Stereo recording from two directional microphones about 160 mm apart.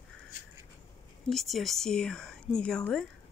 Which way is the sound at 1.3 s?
Centre (ahead or behind).